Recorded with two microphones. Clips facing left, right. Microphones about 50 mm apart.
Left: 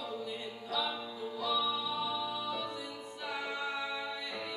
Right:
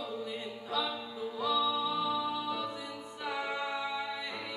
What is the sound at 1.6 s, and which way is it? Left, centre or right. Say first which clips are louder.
Music: right 3 dB; centre.